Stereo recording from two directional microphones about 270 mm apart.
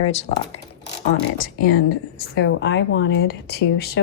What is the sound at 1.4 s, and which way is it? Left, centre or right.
Speech, left.